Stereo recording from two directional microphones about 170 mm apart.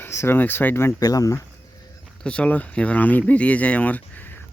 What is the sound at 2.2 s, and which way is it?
Speech, 5° left (ahead or behind).